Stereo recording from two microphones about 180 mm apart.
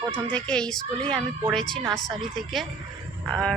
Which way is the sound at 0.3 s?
5° left (ahead or behind).